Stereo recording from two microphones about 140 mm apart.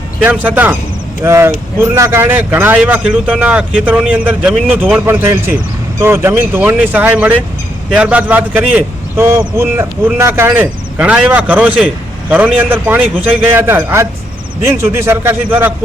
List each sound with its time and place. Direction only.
0.2 s a man's voice: 10° right (ahead or behind)